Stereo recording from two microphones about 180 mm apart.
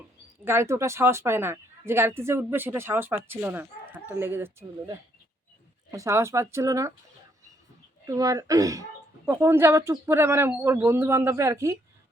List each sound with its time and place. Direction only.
0.4 s speech: 15° right (ahead or behind)
8.0 s speech: 20° right (ahead or behind)